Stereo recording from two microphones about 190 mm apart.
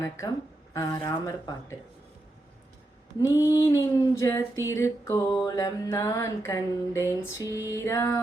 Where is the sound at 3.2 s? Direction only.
15° left (ahead or behind).